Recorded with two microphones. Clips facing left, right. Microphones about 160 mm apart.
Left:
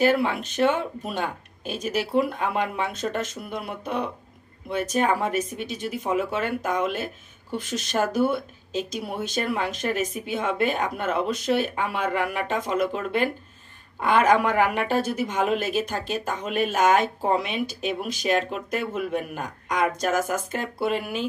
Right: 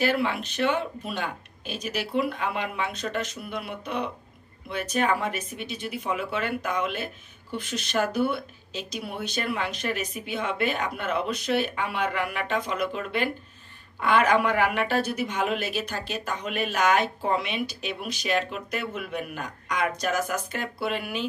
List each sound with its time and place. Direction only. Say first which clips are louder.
0.0 s a woman's voice: left 4 dB; 45° left (ahead or behind)